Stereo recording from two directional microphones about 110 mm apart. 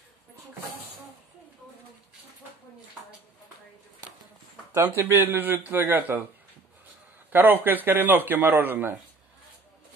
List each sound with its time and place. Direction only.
4.9 s speech: 20° right (ahead or behind)
7.3 s speech: 20° right (ahead or behind)